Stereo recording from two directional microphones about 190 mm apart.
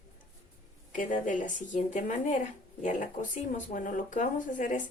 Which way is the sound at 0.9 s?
45° left (ahead or behind).